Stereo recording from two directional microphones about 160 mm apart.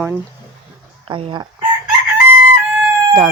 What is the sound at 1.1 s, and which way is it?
Speech, 30° right (ahead or behind).